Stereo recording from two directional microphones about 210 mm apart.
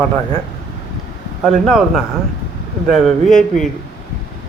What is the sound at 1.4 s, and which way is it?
Speech, centre (ahead or behind).